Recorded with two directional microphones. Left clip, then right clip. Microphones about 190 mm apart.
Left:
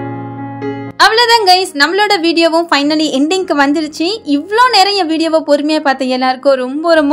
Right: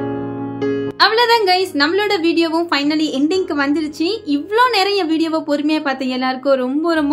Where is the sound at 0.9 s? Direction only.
40° left (ahead or behind).